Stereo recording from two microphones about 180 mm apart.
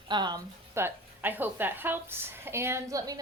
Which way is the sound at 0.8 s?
10° right (ahead or behind).